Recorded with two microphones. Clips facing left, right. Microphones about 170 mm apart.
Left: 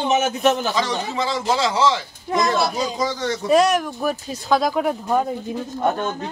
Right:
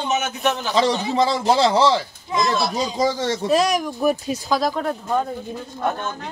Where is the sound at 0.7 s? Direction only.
35° right (ahead or behind).